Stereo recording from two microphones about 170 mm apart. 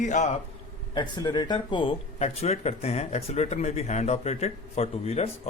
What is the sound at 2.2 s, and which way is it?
Speech, 40° left (ahead or behind).